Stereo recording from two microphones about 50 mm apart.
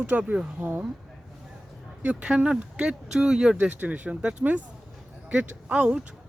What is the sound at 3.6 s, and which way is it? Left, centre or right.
Speech, right.